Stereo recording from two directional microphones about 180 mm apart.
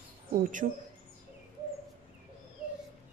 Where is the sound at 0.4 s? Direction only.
45° right (ahead or behind).